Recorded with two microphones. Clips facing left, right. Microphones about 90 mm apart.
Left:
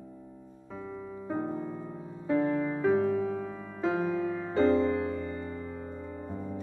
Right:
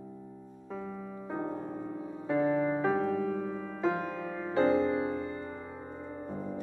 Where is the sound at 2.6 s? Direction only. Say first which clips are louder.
Right 2 dB; 35° right (ahead or behind).